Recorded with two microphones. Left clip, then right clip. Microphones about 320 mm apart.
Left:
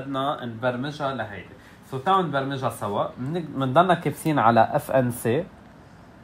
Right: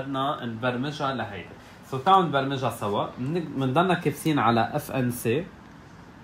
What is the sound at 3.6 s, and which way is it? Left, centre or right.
Speech, centre.